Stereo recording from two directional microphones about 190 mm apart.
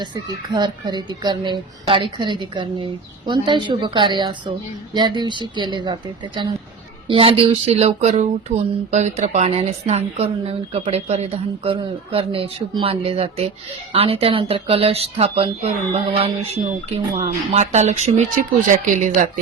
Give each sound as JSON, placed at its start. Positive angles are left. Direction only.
{"t": 0.0, "sound": "speech", "side_deg": -25}